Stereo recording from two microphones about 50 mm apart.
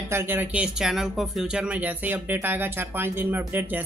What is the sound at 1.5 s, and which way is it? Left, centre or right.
Speech, centre.